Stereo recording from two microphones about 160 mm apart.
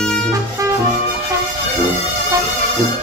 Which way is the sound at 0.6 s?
20° right (ahead or behind).